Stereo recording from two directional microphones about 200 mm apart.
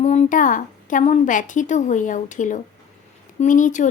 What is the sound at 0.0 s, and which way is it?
A woman's voice, 35° left (ahead or behind).